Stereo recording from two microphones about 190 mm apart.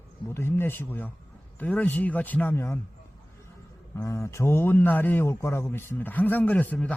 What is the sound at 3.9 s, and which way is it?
Speech, 15° left (ahead or behind).